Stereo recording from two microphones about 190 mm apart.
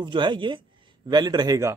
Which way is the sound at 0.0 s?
25° right (ahead or behind).